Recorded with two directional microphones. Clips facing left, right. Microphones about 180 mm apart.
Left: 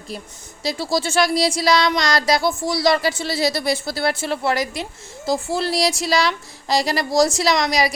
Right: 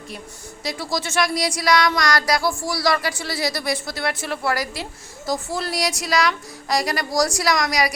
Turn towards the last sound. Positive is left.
turn(degrees=25)  # may be behind; listen again after turning